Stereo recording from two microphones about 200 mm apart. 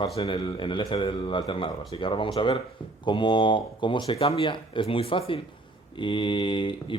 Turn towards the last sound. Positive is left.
turn(degrees=25)  # may be behind; listen again after turning